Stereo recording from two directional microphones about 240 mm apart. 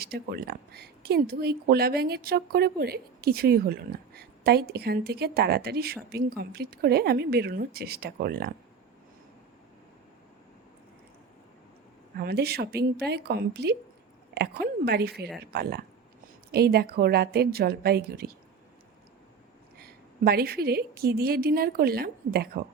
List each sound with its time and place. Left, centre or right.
0.0 s speech: right
12.1 s speech: right
16.5 s speech: right
19.8 s speech: right